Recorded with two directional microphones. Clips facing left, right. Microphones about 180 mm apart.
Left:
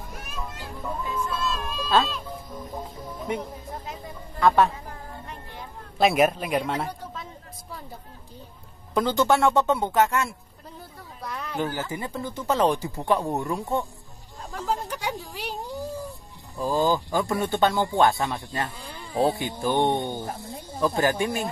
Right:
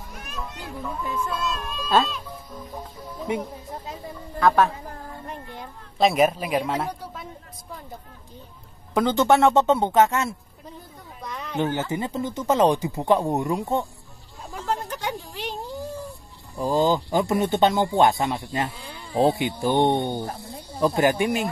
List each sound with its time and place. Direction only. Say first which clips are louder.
0.1 s cat: right 2 dB; 5° left (ahead or behind)
2.3 s speech: left 1 dB; 10° left (ahead or behind)
4.4 s speech: even; centre (ahead or behind)
5.9 s speech: right 1 dB; centre (ahead or behind)
8.9 s speech: right 3 dB; 20° right (ahead or behind)
11.5 s speech: right 5 dB; 20° right (ahead or behind)
14.5 s a sound: even; centre (ahead or behind)
16.5 s speech: right 2 dB; 20° right (ahead or behind)
20.2 s speech: even; 15° left (ahead or behind)
20.8 s speech: right 3 dB; 15° right (ahead or behind)